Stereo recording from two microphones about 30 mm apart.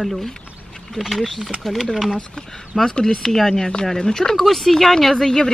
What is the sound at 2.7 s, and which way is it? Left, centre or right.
Speech, right.